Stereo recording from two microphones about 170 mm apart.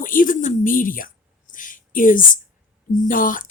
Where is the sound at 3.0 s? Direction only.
50° left (ahead or behind).